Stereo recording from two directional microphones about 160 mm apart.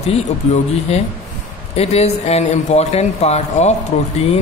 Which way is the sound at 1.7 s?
40° left (ahead or behind).